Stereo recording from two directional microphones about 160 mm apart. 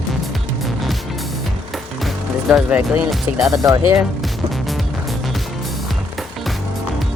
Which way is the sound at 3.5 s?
25° right (ahead or behind).